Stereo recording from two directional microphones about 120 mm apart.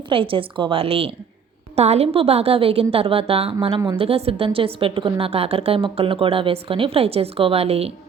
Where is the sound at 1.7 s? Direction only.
65° right (ahead or behind).